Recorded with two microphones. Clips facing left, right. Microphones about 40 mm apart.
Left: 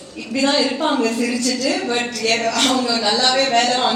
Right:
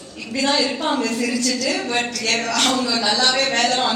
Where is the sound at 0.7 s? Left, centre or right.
Left.